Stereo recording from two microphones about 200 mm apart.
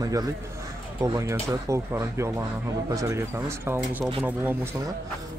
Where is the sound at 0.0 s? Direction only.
20° right (ahead or behind).